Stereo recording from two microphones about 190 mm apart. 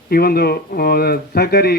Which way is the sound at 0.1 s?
50° left (ahead or behind).